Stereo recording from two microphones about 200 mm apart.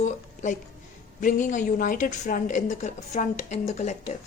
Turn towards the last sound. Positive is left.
turn(degrees=35)  # may be behind; listen again after turning